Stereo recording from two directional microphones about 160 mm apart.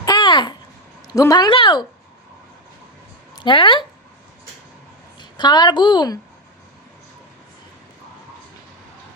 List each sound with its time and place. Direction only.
0.0 s babbling: 25° left (ahead or behind)
1.0 s a woman's voice: 25° left (ahead or behind)
3.3 s speech: 30° left (ahead or behind)
5.2 s a woman's voice: 25° left (ahead or behind)